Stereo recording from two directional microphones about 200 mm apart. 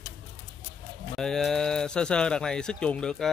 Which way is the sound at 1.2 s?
Centre (ahead or behind).